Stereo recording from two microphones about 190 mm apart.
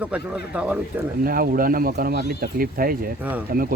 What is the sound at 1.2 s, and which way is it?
Speech, 50° right (ahead or behind).